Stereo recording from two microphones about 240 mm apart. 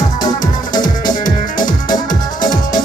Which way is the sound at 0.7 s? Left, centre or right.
Centre.